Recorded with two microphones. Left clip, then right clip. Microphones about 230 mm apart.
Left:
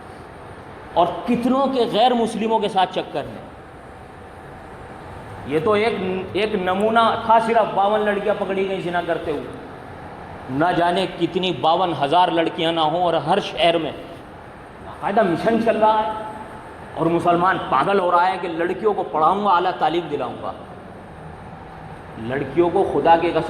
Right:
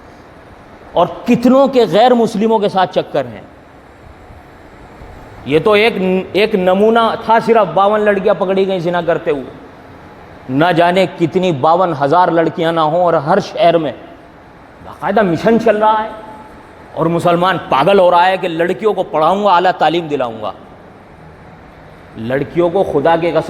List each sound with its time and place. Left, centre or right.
0.9 s a man's voice: right
5.5 s a man's voice: right
10.6 s a man's voice: right
15.0 s a man's voice: right
22.3 s a man's voice: right